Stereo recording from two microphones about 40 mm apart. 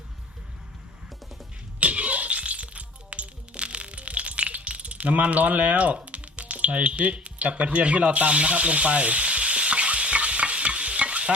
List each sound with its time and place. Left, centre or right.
1.8 s music: right